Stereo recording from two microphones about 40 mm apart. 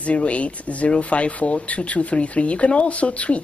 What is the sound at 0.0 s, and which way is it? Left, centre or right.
Speech, left.